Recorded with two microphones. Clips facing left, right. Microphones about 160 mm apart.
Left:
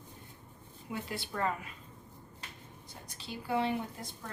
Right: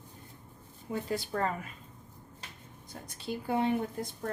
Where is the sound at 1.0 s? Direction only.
45° right (ahead or behind).